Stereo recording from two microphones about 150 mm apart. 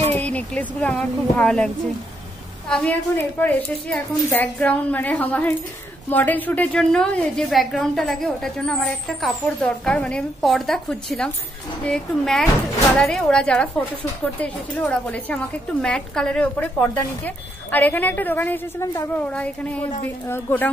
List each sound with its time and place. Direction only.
0.1 s a woman's voice: 10° left (ahead or behind)
2.7 s a woman's voice: 10° left (ahead or behind)